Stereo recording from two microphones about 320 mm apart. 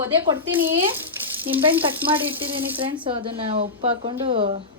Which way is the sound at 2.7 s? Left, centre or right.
Centre.